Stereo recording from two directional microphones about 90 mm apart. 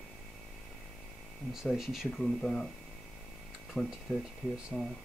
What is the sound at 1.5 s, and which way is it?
Speech, 5° right (ahead or behind).